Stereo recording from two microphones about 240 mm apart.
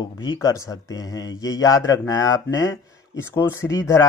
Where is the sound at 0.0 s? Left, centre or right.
Centre.